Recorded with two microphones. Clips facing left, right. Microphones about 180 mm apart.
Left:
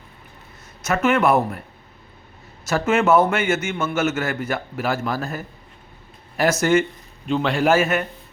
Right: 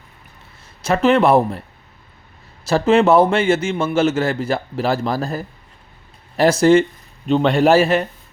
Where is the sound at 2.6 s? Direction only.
30° right (ahead or behind).